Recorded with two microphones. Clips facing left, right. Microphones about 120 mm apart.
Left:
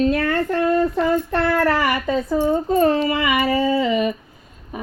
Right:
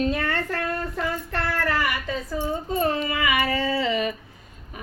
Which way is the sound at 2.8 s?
35° left (ahead or behind).